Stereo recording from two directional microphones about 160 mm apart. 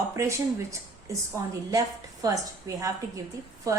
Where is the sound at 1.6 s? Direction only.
20° right (ahead or behind).